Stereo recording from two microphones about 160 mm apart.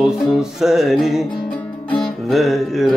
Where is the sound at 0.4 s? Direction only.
5° right (ahead or behind).